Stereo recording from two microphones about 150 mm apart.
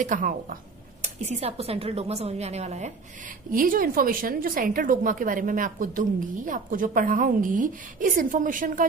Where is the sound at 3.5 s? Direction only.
70° right (ahead or behind).